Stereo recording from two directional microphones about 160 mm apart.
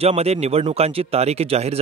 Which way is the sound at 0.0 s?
40° right (ahead or behind).